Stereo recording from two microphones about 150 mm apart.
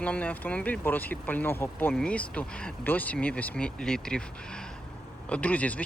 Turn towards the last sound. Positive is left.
turn(degrees=10)  # may be behind; listen again after turning